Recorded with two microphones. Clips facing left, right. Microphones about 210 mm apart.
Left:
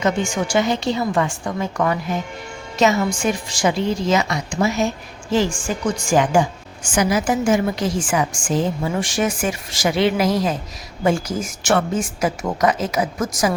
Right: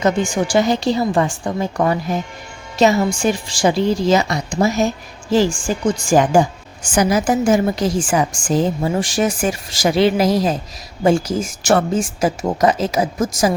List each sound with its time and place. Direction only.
0.0 s a woman's voice: 35° right (ahead or behind)